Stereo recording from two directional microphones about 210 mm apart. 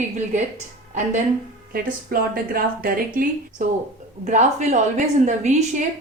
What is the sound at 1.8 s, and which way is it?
A woman's voice, 45° right (ahead or behind).